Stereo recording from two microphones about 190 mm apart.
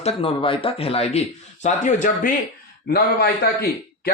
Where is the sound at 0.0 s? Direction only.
30° left (ahead or behind).